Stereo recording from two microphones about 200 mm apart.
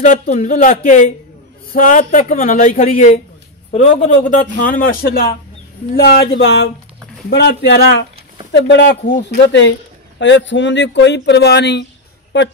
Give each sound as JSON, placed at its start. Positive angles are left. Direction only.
{"t": 0.0, "sound": "a man's voice", "side_deg": 40}